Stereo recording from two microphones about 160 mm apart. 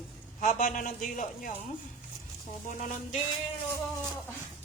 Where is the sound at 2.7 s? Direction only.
50° left (ahead or behind).